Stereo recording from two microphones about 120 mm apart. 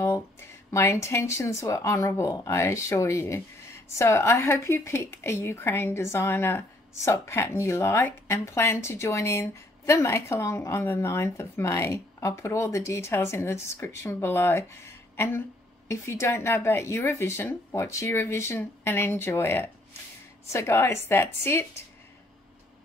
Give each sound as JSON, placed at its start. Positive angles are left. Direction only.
{"t": 0.7, "sound": "speech", "side_deg": 25}